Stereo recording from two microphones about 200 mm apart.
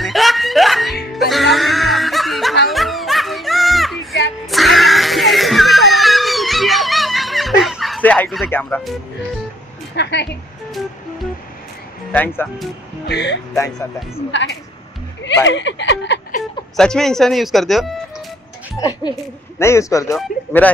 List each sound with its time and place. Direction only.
0.0 s music: centre (ahead or behind)
9.9 s speech: 55° left (ahead or behind)
12.1 s speech: 10° left (ahead or behind)
13.0 s speech: 60° left (ahead or behind)
16.7 s speech: centre (ahead or behind)
18.8 s a woman's voice: 20° left (ahead or behind)